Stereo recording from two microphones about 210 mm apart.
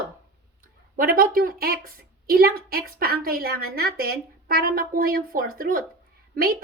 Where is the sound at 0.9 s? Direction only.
40° right (ahead or behind).